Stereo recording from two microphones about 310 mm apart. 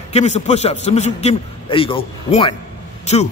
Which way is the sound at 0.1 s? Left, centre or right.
Left.